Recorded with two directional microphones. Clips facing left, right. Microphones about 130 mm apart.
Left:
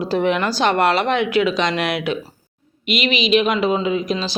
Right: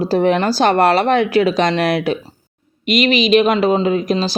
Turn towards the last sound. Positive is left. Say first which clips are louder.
# right 4 dB
turn(degrees=-40)  # may be behind; listen again after turning